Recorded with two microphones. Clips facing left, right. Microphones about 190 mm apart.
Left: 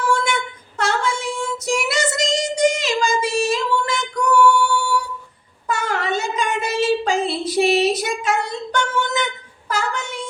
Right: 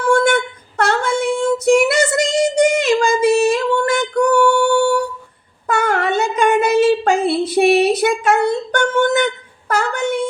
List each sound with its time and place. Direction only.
0.8 s child singing: 60° right (ahead or behind)
5.6 s a sound: 60° right (ahead or behind)
9.6 s child singing: 60° right (ahead or behind)